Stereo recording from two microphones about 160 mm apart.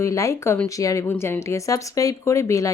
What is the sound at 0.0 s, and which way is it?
Speech, 20° left (ahead or behind).